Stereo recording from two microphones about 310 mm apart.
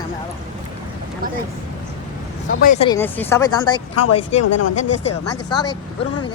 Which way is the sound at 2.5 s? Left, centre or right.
Left.